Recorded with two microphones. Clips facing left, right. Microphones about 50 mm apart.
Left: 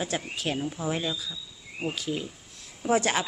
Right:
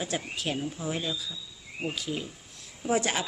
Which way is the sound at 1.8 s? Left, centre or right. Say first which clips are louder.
Left 2 dB; centre.